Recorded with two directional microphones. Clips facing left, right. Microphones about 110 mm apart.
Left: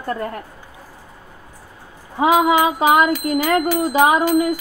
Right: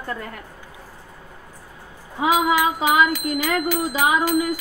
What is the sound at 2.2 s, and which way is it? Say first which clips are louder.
A woman's voice: left 4 dB; 55° left (ahead or behind).